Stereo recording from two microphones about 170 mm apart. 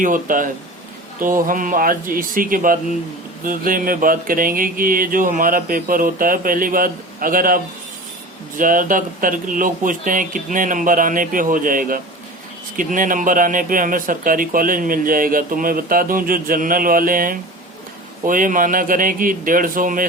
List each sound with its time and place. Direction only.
0.0 s speech: 50° right (ahead or behind)